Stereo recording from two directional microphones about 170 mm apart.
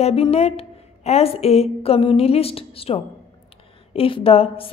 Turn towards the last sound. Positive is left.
turn(degrees=35)  # may be behind; listen again after turning